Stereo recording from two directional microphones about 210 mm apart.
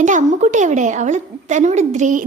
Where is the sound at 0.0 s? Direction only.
35° right (ahead or behind).